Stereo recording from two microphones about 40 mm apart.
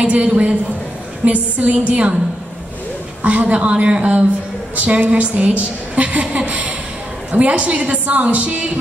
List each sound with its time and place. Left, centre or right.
0.0 s a woman's voice: right
3.3 s a woman's voice: right